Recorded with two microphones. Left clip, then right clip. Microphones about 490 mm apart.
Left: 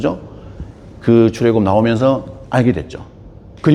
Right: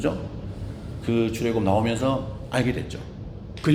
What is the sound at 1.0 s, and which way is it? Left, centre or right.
A man's voice, left.